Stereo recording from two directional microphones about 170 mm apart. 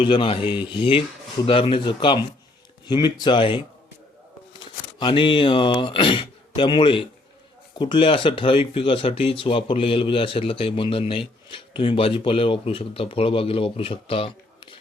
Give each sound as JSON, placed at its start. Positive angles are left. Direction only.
{"t": 0.0, "sound": "speech", "side_deg": 30}
{"t": 4.6, "sound": "speech", "side_deg": 30}